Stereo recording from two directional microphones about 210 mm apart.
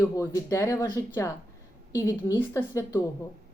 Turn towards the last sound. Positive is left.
turn(degrees=15)  # may be behind; listen again after turning